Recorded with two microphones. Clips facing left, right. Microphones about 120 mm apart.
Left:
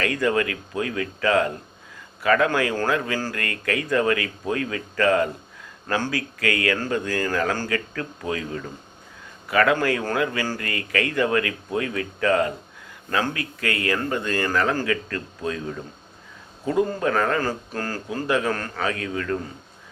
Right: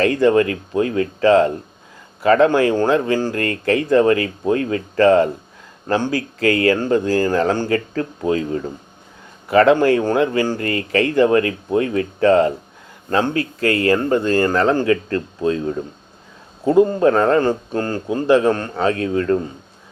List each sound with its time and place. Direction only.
0.0 s a man's voice: 30° right (ahead or behind)
10.6 s a man's voice: 30° right (ahead or behind)